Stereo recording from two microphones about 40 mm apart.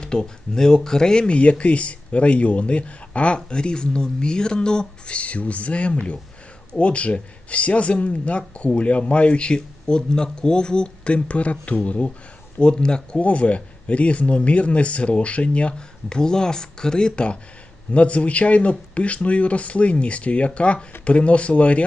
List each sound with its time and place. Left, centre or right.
0.0 s speech: centre
1.3 s speech: left
12.5 s speech: left
13.1 s speech: left